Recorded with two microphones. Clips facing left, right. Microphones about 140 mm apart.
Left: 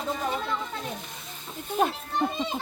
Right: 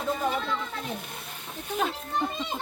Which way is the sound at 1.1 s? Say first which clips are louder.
Right 2 dB; 60° right (ahead or behind).